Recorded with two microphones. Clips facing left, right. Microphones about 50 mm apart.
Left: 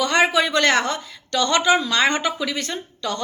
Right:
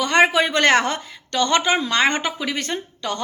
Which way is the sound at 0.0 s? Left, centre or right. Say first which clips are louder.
Right 2 dB; right.